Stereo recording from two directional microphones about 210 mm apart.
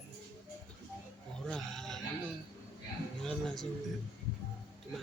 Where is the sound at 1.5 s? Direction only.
Centre (ahead or behind).